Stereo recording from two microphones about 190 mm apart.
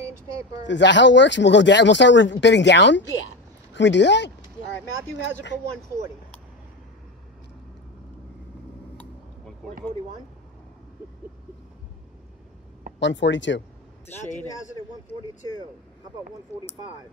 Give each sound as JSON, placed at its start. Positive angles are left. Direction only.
{"t": 0.7, "sound": "speech", "side_deg": 70}
{"t": 9.6, "sound": "speech", "side_deg": 0}
{"t": 13.0, "sound": "speech", "side_deg": 70}